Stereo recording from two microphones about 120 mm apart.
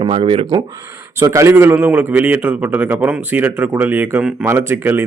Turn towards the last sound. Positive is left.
turn(degrees=-20)  # may be behind; listen again after turning